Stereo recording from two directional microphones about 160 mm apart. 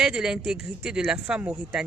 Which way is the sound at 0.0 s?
5° right (ahead or behind).